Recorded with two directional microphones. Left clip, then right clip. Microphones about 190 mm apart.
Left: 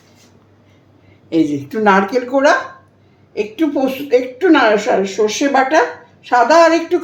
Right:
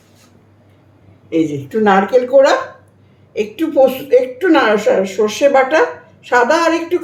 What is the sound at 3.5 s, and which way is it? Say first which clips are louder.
Speech: right 6 dB; 25° left (ahead or behind).